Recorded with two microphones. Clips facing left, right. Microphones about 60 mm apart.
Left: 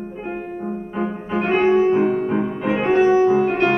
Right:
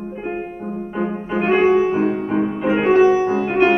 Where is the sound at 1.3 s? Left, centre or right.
Centre.